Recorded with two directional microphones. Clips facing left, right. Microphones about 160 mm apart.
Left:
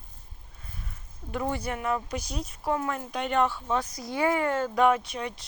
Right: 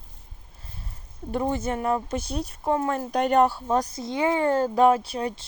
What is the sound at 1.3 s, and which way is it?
Speech, 25° right (ahead or behind).